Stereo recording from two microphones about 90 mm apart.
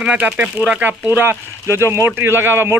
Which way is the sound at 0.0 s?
10° right (ahead or behind).